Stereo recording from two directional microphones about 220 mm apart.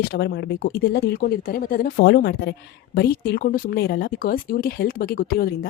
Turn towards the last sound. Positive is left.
turn(degrees=45)  # may be behind; listen again after turning